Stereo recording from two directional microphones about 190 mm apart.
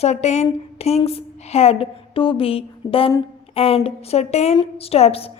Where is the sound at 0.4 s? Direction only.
35° left (ahead or behind).